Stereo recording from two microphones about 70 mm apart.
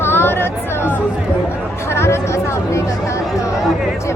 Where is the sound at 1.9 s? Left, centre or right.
Left.